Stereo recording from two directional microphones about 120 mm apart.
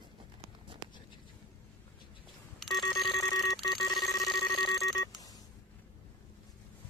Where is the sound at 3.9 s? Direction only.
Centre (ahead or behind).